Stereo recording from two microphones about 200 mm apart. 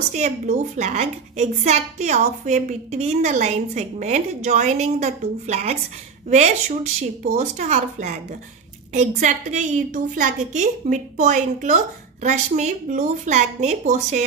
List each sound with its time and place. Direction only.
0.1 s a woman's voice: 35° right (ahead or behind)